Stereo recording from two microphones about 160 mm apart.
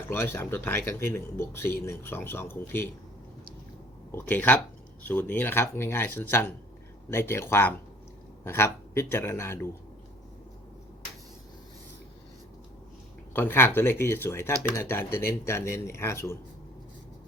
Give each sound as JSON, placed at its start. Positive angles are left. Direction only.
{"t": 0.1, "sound": "speech", "side_deg": 15}
{"t": 4.1, "sound": "speech", "side_deg": 10}
{"t": 13.3, "sound": "speech", "side_deg": 15}